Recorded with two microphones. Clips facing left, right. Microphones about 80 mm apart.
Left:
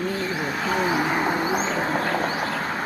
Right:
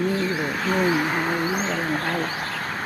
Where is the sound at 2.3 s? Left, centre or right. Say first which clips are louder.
Left 3 dB; centre.